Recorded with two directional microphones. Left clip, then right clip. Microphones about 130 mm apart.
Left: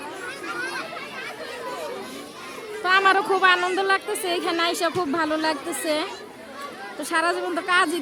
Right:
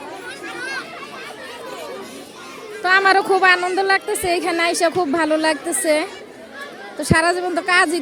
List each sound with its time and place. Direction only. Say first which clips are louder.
2.8 s a woman's voice: right 4 dB; 20° right (ahead or behind)